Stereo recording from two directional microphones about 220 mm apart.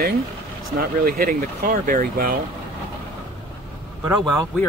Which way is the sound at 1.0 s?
40° right (ahead or behind).